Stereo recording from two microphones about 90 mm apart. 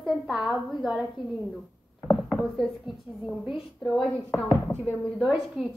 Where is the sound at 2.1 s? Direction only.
5° left (ahead or behind).